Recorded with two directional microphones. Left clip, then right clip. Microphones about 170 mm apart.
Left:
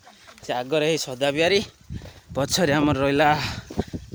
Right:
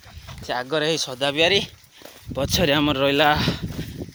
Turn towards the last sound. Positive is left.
turn(degrees=30)  # may be behind; listen again after turning